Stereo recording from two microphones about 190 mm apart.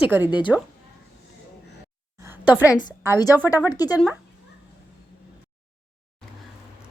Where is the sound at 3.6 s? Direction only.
20° left (ahead or behind).